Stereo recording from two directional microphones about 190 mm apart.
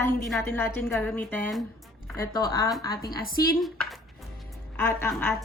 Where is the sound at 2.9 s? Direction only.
50° left (ahead or behind).